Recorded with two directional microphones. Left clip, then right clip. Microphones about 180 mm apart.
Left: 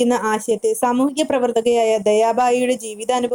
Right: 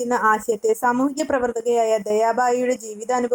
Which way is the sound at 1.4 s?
15° left (ahead or behind).